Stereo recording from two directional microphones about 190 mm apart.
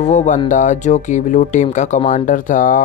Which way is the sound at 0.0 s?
40° left (ahead or behind).